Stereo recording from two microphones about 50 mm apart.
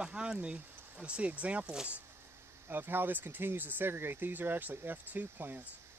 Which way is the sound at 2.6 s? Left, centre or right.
Right.